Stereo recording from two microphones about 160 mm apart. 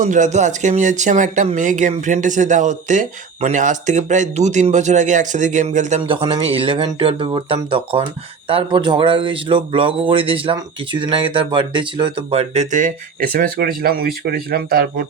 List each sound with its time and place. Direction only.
0.0 s speech: 50° right (ahead or behind)
6.1 s speech: 30° right (ahead or behind); by 15.0 s 70° right (ahead or behind)